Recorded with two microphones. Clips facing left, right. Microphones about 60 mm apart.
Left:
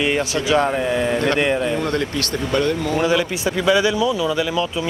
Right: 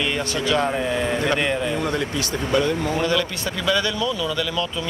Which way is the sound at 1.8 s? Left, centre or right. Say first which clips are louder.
Left 2 dB; centre.